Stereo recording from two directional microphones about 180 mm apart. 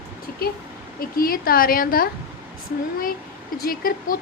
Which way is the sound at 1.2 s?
55° left (ahead or behind).